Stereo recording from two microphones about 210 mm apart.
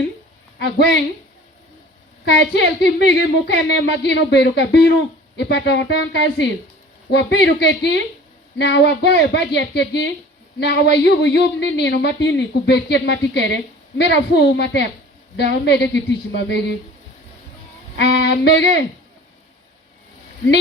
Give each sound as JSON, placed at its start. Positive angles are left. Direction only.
{"t": 2.2, "sound": "a woman's voice", "side_deg": 55}
{"t": 17.9, "sound": "music", "side_deg": 55}